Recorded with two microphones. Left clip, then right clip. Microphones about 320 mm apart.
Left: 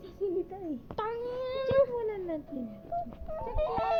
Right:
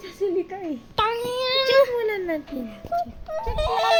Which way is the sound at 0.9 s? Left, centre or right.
Centre.